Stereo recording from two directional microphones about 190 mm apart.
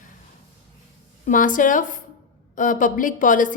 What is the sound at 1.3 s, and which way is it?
A woman's voice, 45° left (ahead or behind).